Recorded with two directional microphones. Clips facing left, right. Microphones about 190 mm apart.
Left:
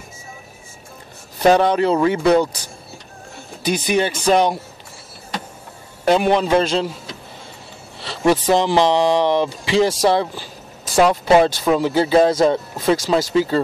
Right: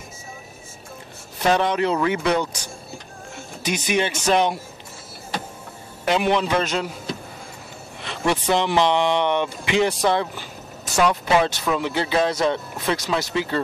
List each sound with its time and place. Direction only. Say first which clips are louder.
1.4 s speech: left 6 dB; 35° left (ahead or behind)
3.6 s speech: left 4 dB; 35° left (ahead or behind)
6.0 s speech: left 5 dB; 40° left (ahead or behind)
8.0 s speech: left 6 dB; 35° left (ahead or behind)